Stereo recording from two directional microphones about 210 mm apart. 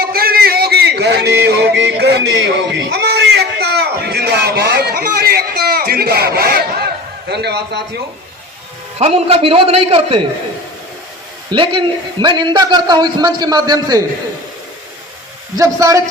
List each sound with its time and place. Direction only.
0.0 s a sound: 45° right (ahead or behind)
9.0 s a man's voice: 30° right (ahead or behind)
11.5 s a man's voice: 25° right (ahead or behind)
15.5 s a man's voice: 15° right (ahead or behind)